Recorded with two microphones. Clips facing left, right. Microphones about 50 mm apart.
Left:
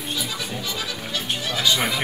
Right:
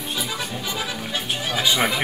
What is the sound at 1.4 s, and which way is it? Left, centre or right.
Speech, centre.